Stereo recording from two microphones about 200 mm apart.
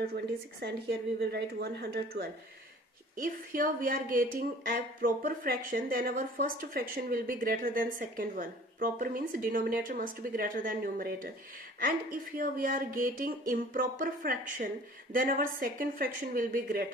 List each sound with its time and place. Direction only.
0.0 s a woman's voice: 50° right (ahead or behind)